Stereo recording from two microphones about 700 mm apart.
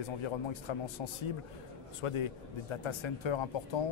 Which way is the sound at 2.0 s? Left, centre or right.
Left.